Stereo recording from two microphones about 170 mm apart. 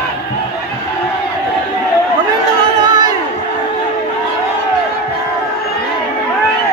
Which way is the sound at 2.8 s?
25° right (ahead or behind).